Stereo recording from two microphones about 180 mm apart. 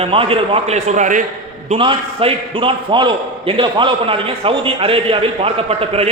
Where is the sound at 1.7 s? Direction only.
30° right (ahead or behind).